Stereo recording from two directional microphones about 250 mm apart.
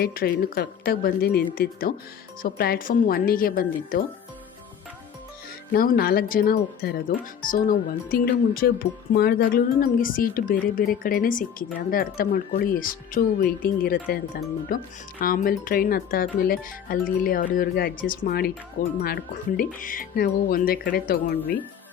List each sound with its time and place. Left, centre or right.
0.0 s speech: left
5.7 s speech: left